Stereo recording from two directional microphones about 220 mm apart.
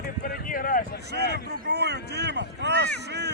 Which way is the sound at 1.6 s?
50° right (ahead or behind).